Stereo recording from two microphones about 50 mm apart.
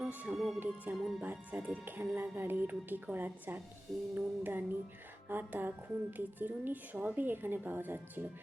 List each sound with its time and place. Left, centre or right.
0.0 s music: right
0.3 s speech: centre
0.9 s a woman's voice: right